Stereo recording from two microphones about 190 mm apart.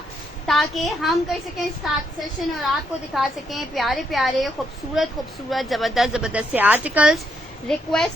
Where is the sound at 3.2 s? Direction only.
Centre (ahead or behind).